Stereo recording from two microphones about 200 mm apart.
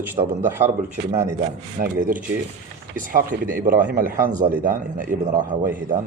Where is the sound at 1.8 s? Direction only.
40° right (ahead or behind).